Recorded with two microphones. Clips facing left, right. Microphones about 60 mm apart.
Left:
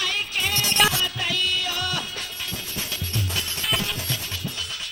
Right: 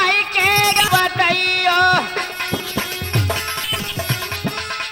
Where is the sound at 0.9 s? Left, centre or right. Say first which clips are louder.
Right 11 dB; right.